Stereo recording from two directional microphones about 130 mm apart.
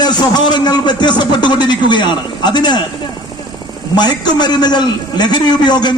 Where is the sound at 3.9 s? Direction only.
35° left (ahead or behind).